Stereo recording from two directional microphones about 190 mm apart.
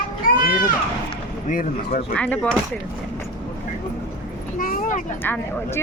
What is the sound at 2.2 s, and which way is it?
Speech, 5° left (ahead or behind).